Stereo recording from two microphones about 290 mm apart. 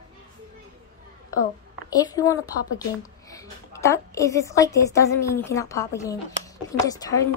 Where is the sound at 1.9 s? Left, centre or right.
Centre.